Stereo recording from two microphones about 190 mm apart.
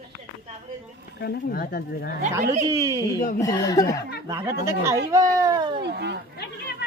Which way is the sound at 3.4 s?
20° left (ahead or behind).